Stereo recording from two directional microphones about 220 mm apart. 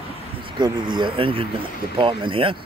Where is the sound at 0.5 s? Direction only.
20° right (ahead or behind).